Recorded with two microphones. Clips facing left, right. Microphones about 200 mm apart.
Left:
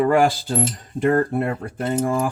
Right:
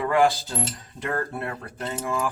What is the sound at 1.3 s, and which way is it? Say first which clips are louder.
Speech: left 9 dB; 45° left (ahead or behind).